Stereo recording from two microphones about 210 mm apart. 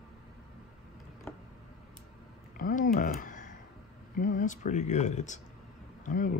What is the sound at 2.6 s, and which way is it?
Speech, 40° left (ahead or behind).